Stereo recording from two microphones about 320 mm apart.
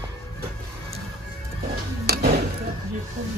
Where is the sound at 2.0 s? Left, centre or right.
Right.